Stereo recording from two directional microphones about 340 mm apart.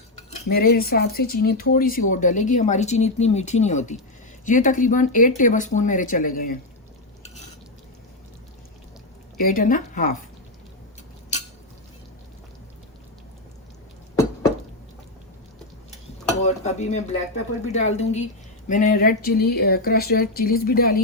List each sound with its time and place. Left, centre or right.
0.3 s speech: left
9.4 s speech: left
16.4 s speech: centre